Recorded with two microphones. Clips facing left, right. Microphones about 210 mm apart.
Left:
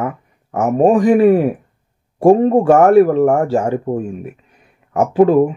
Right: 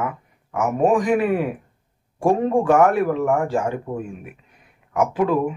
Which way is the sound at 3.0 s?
40° left (ahead or behind).